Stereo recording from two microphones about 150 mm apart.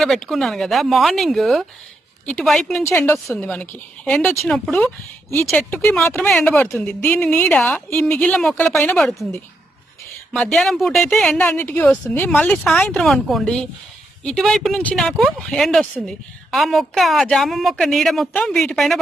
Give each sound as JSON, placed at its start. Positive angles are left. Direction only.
{"t": 0.0, "sound": "a woman's voice", "side_deg": 0}
{"t": 6.0, "sound": "a woman's voice", "side_deg": 15}
{"t": 6.2, "sound": "a woman's voice", "side_deg": 5}
{"t": 9.0, "sound": "a woman's voice", "side_deg": 0}
{"t": 10.3, "sound": "a woman's voice", "side_deg": 5}